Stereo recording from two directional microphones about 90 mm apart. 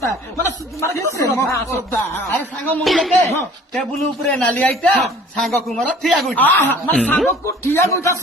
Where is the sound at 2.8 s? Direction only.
Centre (ahead or behind).